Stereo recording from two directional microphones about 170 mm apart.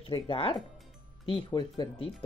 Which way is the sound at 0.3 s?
30° left (ahead or behind).